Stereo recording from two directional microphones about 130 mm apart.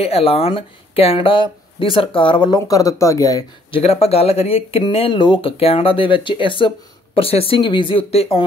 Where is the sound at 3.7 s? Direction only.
50° left (ahead or behind).